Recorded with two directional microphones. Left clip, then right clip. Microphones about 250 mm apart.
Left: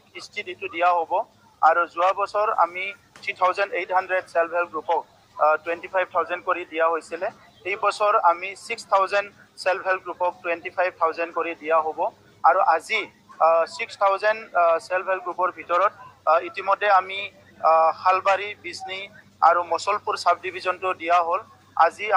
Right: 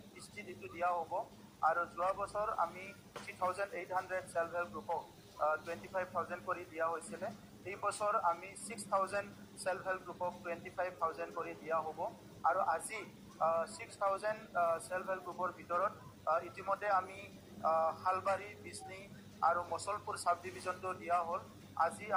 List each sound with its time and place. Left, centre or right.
0.2 s a man's voice: left